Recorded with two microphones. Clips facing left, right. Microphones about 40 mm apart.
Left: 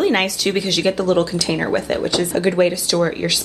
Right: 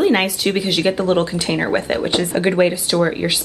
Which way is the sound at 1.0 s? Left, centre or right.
Right.